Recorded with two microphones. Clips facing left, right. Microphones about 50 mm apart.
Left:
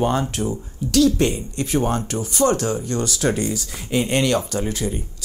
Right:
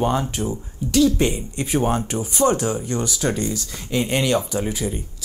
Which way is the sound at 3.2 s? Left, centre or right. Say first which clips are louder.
Left 2 dB; centre.